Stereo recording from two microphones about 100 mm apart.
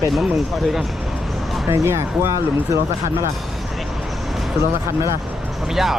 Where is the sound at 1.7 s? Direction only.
30° right (ahead or behind).